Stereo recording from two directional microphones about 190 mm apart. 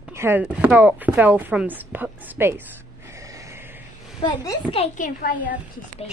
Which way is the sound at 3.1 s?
15° right (ahead or behind).